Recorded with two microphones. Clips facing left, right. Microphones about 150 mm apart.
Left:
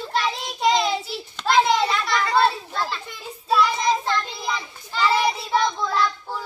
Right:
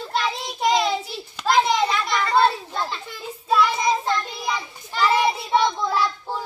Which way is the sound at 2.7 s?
20° right (ahead or behind).